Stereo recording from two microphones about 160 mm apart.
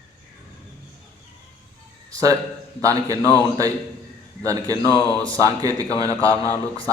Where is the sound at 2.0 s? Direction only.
20° right (ahead or behind).